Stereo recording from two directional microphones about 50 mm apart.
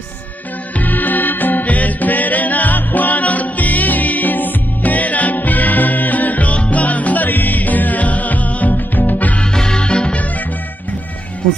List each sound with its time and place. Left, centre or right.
0.7 s music: left
9.4 s music: centre